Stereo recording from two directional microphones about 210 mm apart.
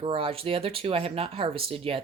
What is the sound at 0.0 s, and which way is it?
Speech, 25° right (ahead or behind).